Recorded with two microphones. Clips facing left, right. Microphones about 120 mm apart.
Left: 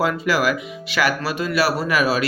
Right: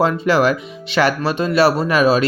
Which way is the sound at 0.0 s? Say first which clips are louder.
Right 5 dB; 25° right (ahead or behind).